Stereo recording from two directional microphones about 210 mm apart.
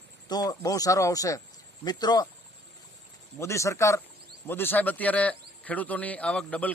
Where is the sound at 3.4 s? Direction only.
15° left (ahead or behind).